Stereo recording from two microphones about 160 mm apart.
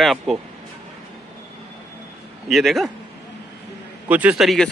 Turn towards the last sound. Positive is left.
turn(degrees=0)  # may be behind; listen again after turning